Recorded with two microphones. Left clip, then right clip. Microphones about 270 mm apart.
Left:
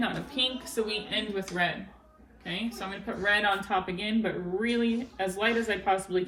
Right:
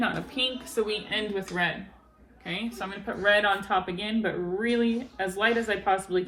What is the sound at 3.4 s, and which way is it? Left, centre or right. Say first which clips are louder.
Speech: right 2 dB; centre.